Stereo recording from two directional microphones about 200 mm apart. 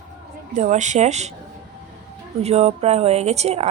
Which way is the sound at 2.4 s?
30° right (ahead or behind).